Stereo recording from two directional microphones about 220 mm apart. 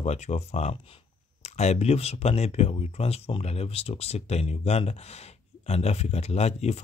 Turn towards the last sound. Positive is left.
turn(degrees=30)  # may be behind; listen again after turning